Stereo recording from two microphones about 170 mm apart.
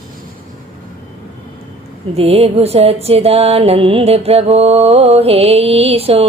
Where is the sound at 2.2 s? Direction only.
35° right (ahead or behind).